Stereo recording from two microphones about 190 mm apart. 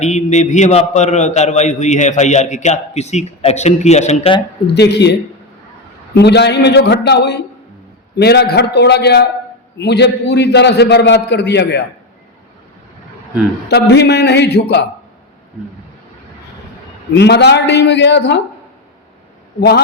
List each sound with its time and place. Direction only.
0.0 s a man's voice: 40° left (ahead or behind)
4.6 s a man's voice: 60° left (ahead or behind)
6.1 s a man's voice: 60° left (ahead or behind)
13.7 s a man's voice: 60° left (ahead or behind)
17.2 s a man's voice: 60° left (ahead or behind)
19.5 s a man's voice: 55° left (ahead or behind)